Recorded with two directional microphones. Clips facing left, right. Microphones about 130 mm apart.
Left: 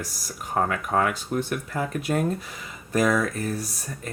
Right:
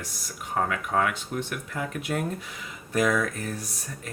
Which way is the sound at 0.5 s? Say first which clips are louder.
Left 2 dB; 40° left (ahead or behind).